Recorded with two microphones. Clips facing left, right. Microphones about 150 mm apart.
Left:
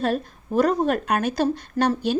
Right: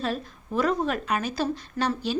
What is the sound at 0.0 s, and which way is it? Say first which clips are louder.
A woman's voice: left 6 dB; 45° left (ahead or behind).